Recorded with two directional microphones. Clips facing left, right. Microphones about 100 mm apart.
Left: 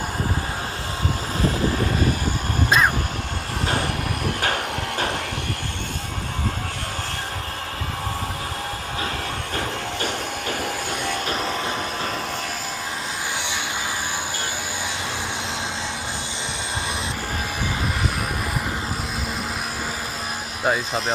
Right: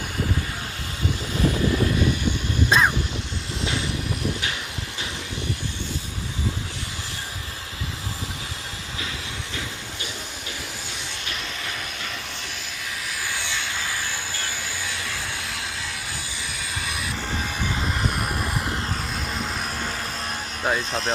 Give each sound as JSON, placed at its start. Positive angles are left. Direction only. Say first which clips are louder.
{"t": 2.6, "sound": "vehicle", "louder": "left 1 dB", "side_deg": 5}
{"t": 4.4, "sound": "music", "louder": "left 7 dB", "side_deg": 55}
{"t": 11.0, "sound": "a sound", "louder": "left 10 dB", "side_deg": 45}
{"t": 20.7, "sound": "speech", "louder": "left 2 dB", "side_deg": 5}